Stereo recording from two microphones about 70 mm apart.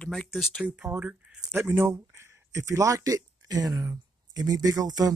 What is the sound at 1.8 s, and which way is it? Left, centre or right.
Speech, right.